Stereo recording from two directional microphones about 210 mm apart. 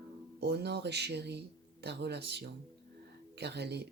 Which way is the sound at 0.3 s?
50° right (ahead or behind).